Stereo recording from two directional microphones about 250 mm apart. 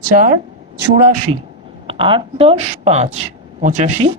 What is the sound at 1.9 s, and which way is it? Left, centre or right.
Speech, right.